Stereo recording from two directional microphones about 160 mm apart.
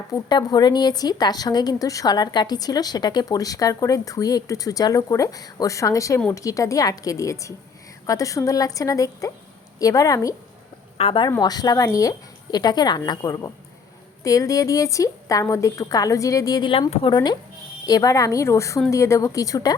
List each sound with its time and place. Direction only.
0.1 s a woman's voice: 25° left (ahead or behind)
10.9 s a woman's voice: 35° left (ahead or behind)
11.3 s a woman's voice: 25° left (ahead or behind)